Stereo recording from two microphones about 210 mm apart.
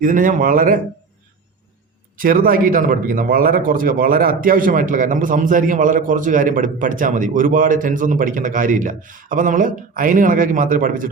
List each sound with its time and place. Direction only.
0.0 s a man's voice: 40° right (ahead or behind)
2.1 s a man's voice: 40° right (ahead or behind)